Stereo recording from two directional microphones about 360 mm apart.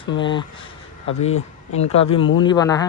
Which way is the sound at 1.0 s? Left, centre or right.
Left.